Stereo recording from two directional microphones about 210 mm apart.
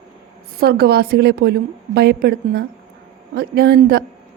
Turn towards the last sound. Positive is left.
turn(degrees=-50)  # may be behind; listen again after turning